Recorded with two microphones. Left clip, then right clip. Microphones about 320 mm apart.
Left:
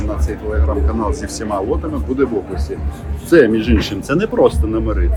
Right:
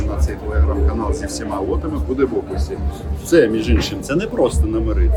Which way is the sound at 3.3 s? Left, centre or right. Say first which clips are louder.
Left 3 dB; centre.